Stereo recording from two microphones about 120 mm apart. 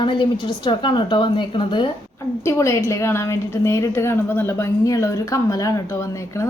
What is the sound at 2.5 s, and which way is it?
A woman's voice, 25° left (ahead or behind).